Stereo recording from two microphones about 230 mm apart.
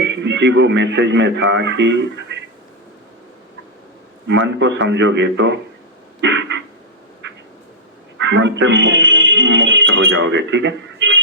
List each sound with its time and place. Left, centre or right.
0.0 s speech: right
4.3 s a man's voice: right
8.2 s speech: right